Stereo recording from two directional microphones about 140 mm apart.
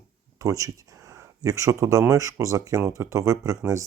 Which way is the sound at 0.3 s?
25° right (ahead or behind).